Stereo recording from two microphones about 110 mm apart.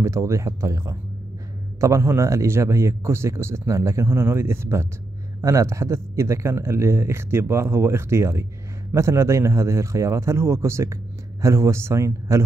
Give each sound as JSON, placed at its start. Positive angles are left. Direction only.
{"t": 0.0, "sound": "speech", "side_deg": -25}